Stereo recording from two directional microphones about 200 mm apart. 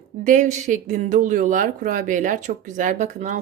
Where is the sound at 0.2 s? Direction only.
40° right (ahead or behind).